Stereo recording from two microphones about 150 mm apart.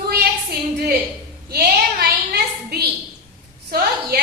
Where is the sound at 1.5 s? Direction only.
90° right.